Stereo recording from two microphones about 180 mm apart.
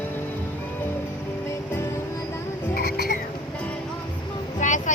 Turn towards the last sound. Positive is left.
turn(degrees=45)  # may be behind; listen again after turning